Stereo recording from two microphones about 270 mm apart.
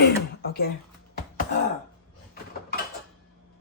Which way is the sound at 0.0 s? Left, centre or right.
Left.